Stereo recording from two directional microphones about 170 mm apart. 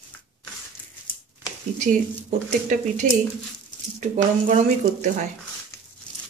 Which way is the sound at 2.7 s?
50° right (ahead or behind).